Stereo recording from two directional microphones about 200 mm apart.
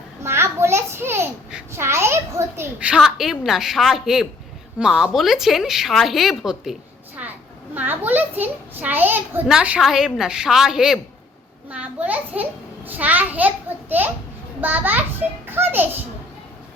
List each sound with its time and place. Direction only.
0.2 s a child's voice: 15° right (ahead or behind)